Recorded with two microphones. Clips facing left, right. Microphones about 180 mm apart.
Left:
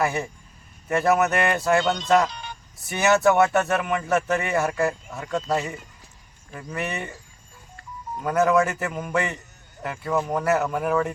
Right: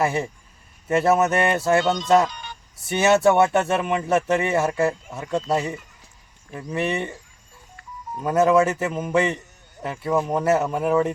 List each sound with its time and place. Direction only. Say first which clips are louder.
0.0 s speech: right 2 dB; 25° right (ahead or behind)
6.7 s speech: right 5 dB; 25° right (ahead or behind)
8.2 s speech: right 3 dB; 25° right (ahead or behind)